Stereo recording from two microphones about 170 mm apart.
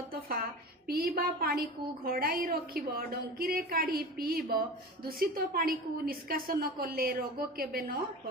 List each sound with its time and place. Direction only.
0.1 s a woman's voice: 60° right (ahead or behind)